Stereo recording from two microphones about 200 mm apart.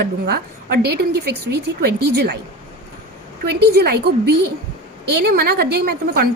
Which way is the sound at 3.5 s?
55° right (ahead or behind).